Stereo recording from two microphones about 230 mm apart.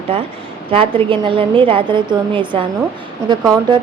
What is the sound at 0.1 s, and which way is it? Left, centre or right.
A woman's voice, right.